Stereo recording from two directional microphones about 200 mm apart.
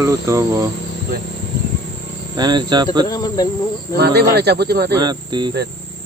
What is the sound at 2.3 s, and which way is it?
Speech, 20° right (ahead or behind).